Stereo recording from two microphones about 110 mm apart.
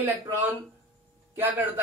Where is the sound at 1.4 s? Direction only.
15° right (ahead or behind).